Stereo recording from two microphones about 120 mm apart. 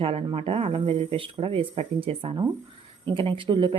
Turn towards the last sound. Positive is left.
turn(degrees=-45)  # may be behind; listen again after turning